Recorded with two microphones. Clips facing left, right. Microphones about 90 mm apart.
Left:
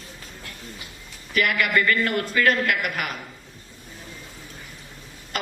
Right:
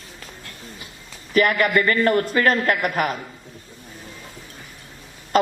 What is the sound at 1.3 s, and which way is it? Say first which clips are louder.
A man's voice: right 4 dB; 40° right (ahead or behind).